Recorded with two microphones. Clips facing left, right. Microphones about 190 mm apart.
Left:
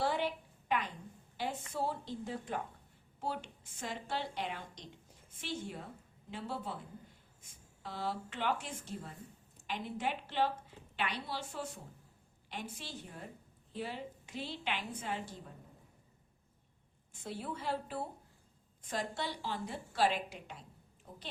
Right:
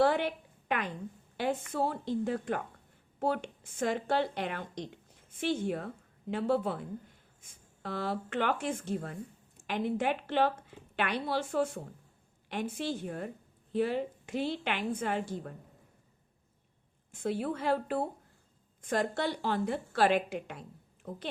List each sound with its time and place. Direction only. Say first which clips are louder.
0.0 s a sound: right 7 dB; 60° right (ahead or behind)
1.7 s a woman's voice: right 6 dB; 60° right (ahead or behind)
7.8 s a woman's voice: right 5 dB; 60° right (ahead or behind)
17.1 s a woman's voice: right 9 dB; 55° right (ahead or behind)